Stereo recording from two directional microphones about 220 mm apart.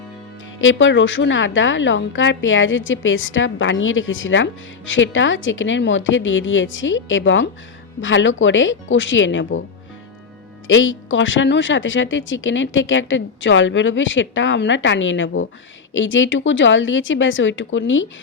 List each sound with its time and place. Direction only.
0.6 s speech: 60° left (ahead or behind)
10.7 s speech: 60° left (ahead or behind)